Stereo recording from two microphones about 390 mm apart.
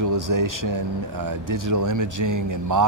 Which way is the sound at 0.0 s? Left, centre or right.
Right.